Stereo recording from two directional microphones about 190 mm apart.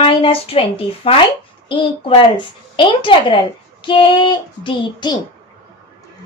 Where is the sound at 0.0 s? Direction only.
30° left (ahead or behind).